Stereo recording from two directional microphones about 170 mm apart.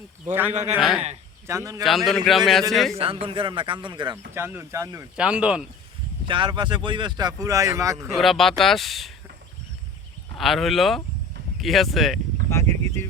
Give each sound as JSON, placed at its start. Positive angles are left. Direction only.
{"t": 0.7, "sound": "speech", "side_deg": 0}
{"t": 1.5, "sound": "speech", "side_deg": -15}
{"t": 1.8, "sound": "speech", "side_deg": 0}
{"t": 2.9, "sound": "speech", "side_deg": -35}
{"t": 4.4, "sound": "speech", "side_deg": -15}
{"t": 5.1, "sound": "speech", "side_deg": -5}
{"t": 6.2, "sound": "speech", "side_deg": -30}
{"t": 8.0, "sound": "speech", "side_deg": 0}
{"t": 10.3, "sound": "speech", "side_deg": 0}
{"t": 12.5, "sound": "speech", "side_deg": 15}